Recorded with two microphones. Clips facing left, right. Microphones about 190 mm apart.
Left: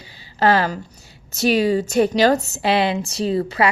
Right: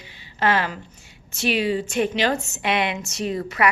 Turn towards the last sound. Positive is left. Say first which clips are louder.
# left 5 dB
turn(degrees=30)  # may be behind; listen again after turning